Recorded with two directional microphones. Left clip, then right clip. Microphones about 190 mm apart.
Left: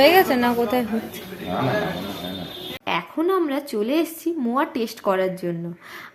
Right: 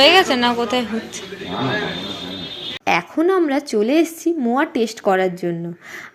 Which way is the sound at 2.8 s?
25° right (ahead or behind).